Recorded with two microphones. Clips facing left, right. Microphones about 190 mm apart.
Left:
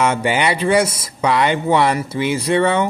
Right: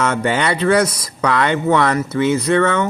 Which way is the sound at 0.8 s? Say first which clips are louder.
Right 2 dB; 25° left (ahead or behind).